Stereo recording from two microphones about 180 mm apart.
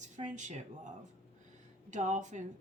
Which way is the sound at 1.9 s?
45° right (ahead or behind).